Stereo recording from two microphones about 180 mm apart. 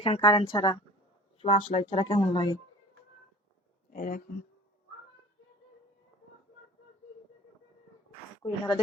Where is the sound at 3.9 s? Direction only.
50° left (ahead or behind).